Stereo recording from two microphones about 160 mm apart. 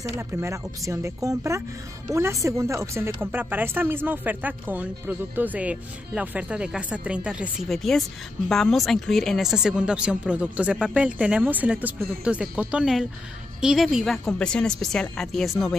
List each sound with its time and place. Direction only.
0.2 s a woman's voice: 15° right (ahead or behind); by 15.7 s centre (ahead or behind)